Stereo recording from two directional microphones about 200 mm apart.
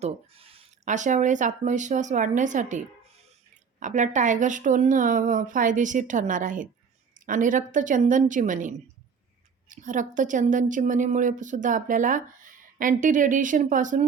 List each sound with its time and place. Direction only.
0.0 s a woman's voice: 30° right (ahead or behind)